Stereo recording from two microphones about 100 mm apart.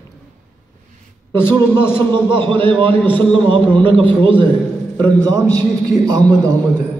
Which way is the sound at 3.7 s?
60° right (ahead or behind).